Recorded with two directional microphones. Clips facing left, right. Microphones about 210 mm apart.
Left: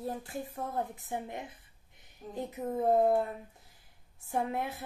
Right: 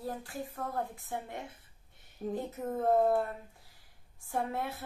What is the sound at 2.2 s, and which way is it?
Speech, 55° right (ahead or behind).